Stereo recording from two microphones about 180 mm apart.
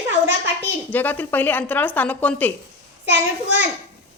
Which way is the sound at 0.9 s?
10° left (ahead or behind).